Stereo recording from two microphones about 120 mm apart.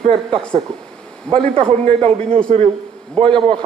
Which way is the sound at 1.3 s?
10° left (ahead or behind).